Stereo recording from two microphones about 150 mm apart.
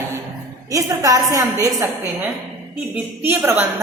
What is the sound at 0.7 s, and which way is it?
Speech, 20° right (ahead or behind).